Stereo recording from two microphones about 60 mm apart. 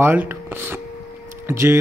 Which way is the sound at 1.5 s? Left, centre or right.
Right.